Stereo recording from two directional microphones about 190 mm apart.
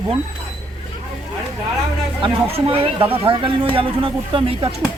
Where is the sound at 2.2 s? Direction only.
20° right (ahead or behind).